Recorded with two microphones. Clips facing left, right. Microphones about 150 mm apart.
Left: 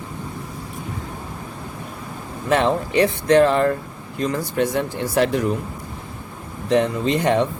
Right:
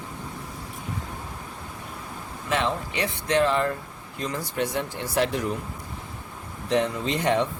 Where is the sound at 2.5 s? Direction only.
50° left (ahead or behind).